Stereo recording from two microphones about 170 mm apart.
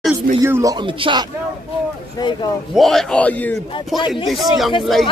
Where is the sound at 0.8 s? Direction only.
30° right (ahead or behind).